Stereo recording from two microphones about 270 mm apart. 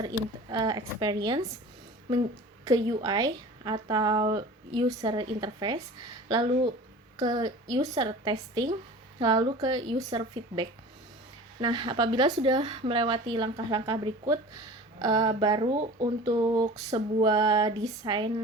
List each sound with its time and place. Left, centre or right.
0.5 s speech: centre
2.6 s speech: centre
16.2 s speech: centre